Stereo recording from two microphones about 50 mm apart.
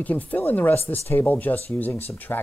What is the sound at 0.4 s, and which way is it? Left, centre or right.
Speech, left.